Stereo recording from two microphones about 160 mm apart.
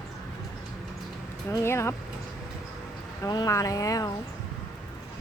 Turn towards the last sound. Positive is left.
turn(degrees=20)  # may be behind; listen again after turning